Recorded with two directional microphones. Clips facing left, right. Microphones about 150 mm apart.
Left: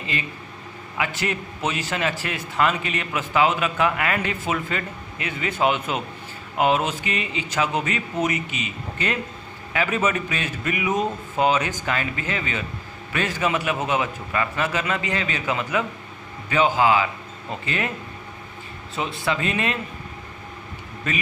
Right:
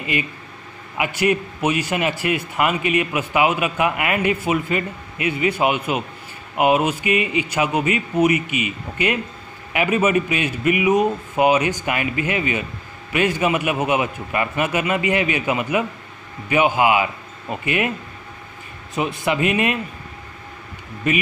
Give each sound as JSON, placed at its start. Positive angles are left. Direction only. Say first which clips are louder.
{"t": 0.9, "sound": "a man's voice", "louder": "right 7 dB", "side_deg": -15}
{"t": 18.9, "sound": "a man's voice", "louder": "right 4 dB", "side_deg": -15}